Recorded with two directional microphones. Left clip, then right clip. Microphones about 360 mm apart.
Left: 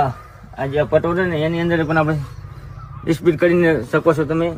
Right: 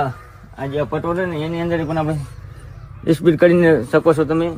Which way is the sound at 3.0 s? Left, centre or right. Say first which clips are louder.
Right 3 dB; centre.